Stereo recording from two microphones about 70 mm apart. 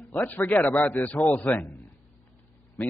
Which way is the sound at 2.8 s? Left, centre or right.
Left.